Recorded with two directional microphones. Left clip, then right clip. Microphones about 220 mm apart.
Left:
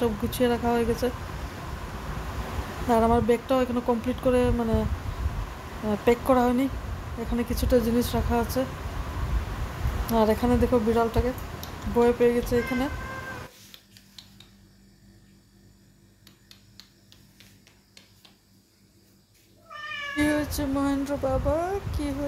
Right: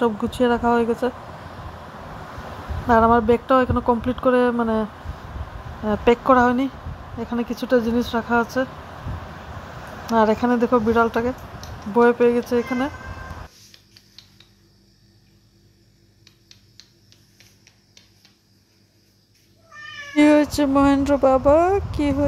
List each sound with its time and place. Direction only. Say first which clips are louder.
0.0 s speech: right 5 dB; 20° right (ahead or behind)
2.9 s speech: right 6 dB; 20° right (ahead or behind)
5.9 s speech: right 6 dB; 20° right (ahead or behind)
10.0 s speech: right 5 dB; 20° right (ahead or behind)
14.2 s a sound: even; 5° left (ahead or behind)
20.2 s speech: right 11 dB; 35° right (ahead or behind)